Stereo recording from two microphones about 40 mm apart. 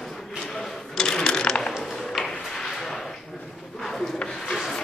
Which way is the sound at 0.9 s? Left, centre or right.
Centre.